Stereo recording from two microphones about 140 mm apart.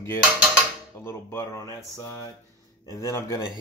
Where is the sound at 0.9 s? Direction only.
20° left (ahead or behind).